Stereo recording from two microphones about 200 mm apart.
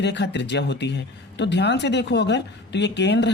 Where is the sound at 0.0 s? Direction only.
60° left (ahead or behind).